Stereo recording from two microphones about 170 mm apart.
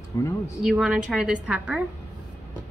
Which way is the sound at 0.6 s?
Centre (ahead or behind).